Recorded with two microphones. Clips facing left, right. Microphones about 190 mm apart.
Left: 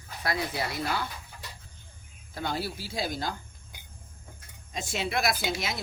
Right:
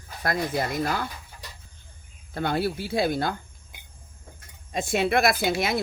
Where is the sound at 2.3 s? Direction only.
60° right (ahead or behind).